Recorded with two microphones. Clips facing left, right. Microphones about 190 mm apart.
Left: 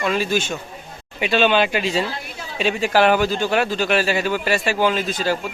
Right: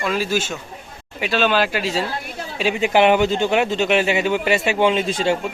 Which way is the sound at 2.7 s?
20° right (ahead or behind).